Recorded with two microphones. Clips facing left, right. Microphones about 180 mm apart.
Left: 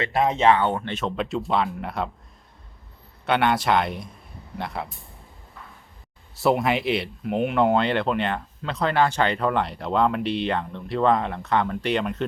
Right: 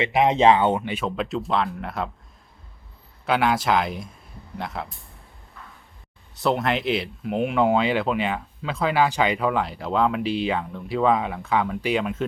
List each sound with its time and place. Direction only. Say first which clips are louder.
0.0 s speech: right 2 dB; 15° right (ahead or behind)
0.8 s speech: right 1 dB; 5° right (ahead or behind)
3.2 s speech: even; centre (ahead or behind)
6.4 s speech: left 1 dB; centre (ahead or behind)